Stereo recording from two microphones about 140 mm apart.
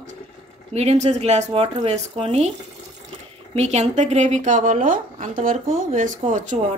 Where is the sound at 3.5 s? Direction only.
50° right (ahead or behind).